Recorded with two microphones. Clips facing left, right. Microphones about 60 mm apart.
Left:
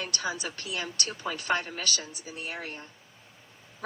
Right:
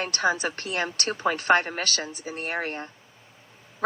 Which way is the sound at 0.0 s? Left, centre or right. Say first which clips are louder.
Right 8 dB; right.